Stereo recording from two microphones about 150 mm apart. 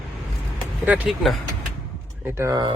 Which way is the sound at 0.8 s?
10° right (ahead or behind).